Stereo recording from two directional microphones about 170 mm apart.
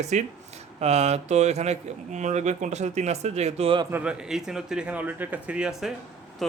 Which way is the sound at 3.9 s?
10° right (ahead or behind).